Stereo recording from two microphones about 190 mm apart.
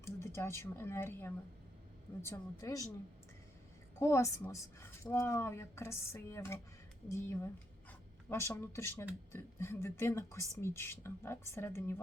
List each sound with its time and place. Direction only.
0.2 s speech: 15° left (ahead or behind)
4.0 s speech: 15° left (ahead or behind)